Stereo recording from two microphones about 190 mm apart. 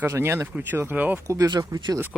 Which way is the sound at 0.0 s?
10° right (ahead or behind).